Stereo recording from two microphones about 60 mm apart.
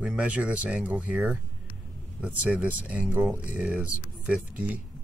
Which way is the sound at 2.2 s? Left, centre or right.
Centre.